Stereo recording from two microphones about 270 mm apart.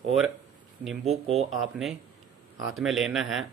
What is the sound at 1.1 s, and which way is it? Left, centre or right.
Speech, right.